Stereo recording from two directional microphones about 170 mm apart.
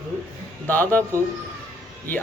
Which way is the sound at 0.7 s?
10° left (ahead or behind).